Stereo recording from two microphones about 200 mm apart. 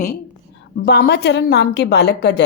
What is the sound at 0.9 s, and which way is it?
A woman's voice, 55° left (ahead or behind).